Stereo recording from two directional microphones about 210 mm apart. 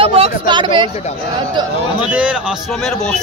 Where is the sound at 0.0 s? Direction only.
25° right (ahead or behind).